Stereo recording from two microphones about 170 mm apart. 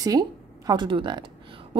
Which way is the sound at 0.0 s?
20° right (ahead or behind).